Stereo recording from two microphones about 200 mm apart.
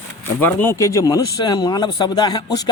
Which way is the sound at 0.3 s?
10° left (ahead or behind).